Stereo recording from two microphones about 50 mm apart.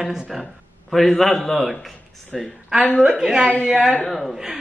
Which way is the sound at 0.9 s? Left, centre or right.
Centre.